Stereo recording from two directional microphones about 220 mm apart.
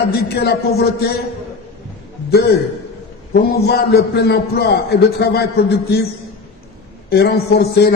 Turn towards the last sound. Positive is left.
turn(degrees=45)  # may be behind; listen again after turning